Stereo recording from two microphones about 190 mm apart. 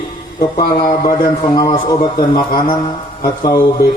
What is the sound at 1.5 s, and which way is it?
Mantra, 25° left (ahead or behind).